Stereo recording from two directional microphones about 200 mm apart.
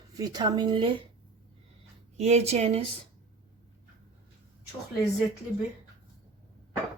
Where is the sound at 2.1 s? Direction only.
35° right (ahead or behind).